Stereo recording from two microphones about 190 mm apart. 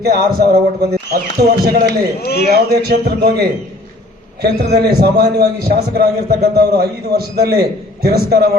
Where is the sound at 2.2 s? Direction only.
55° left (ahead or behind).